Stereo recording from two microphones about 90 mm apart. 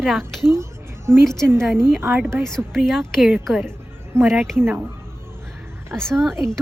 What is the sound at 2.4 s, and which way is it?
Speech, 5° left (ahead or behind).